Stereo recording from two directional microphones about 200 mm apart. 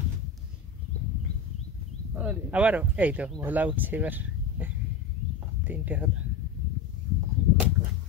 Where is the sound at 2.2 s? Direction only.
5° right (ahead or behind).